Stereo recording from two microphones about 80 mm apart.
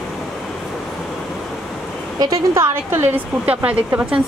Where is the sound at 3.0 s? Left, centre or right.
Centre.